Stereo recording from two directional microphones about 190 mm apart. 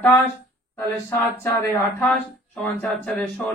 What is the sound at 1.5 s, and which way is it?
Speech, 5° left (ahead or behind).